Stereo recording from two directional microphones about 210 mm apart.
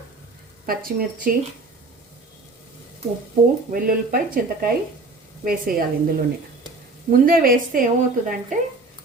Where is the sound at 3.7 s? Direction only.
45° right (ahead or behind).